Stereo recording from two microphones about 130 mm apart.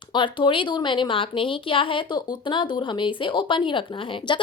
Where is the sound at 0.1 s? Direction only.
40° left (ahead or behind).